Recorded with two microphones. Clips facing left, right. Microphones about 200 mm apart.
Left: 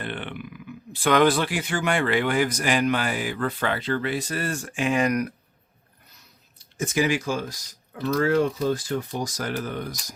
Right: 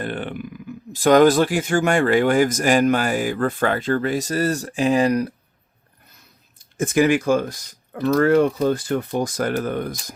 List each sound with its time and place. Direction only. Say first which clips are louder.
0.0 s speech: right 6 dB; 40° right (ahead or behind)
6.1 s speech: right 2 dB; 50° right (ahead or behind)